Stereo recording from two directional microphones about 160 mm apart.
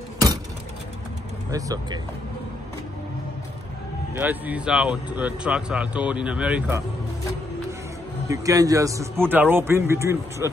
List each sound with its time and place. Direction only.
1.5 s speech: 20° right (ahead or behind)
4.2 s speech: 10° right (ahead or behind)
8.3 s speech: 20° right (ahead or behind)